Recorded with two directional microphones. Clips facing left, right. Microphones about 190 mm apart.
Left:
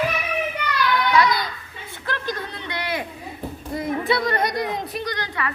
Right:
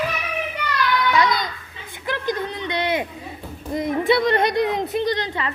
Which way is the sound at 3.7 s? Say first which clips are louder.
Right 4 dB; 20° right (ahead or behind).